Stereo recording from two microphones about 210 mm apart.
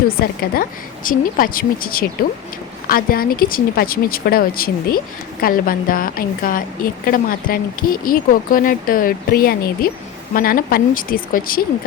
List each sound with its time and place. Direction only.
0.1 s speech: 45° left (ahead or behind)